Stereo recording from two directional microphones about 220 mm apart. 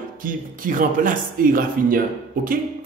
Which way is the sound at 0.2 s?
40° right (ahead or behind).